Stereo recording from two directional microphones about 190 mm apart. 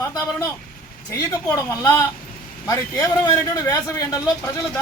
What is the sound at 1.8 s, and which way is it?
A man's voice, 15° left (ahead or behind).